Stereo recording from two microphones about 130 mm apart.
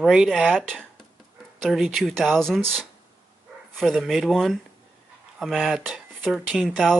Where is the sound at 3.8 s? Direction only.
Centre (ahead or behind).